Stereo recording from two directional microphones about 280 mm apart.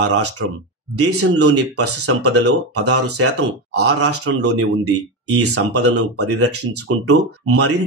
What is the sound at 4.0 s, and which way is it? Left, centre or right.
Speech, right.